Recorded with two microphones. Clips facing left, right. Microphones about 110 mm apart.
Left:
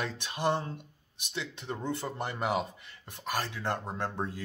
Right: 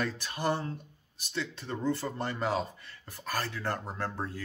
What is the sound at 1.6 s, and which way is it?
Speech, 20° left (ahead or behind).